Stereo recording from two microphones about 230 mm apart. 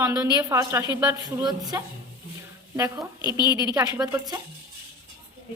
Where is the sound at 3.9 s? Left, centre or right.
Centre.